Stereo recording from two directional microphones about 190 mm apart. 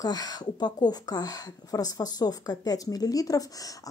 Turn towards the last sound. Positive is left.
turn(degrees=20)  # may be behind; listen again after turning